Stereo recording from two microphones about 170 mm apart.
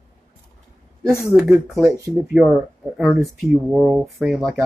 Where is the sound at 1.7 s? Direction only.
10° right (ahead or behind).